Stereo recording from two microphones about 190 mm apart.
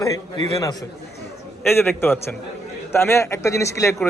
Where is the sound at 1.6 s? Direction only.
10° left (ahead or behind).